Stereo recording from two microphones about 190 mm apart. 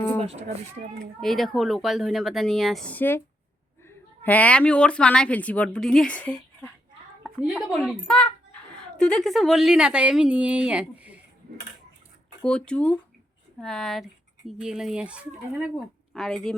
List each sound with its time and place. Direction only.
0.2 s speech: 35° right (ahead or behind)
1.2 s a woman's voice: centre (ahead or behind)
7.2 s a woman's voice: 5° right (ahead or behind)
12.4 s speech: 5° left (ahead or behind)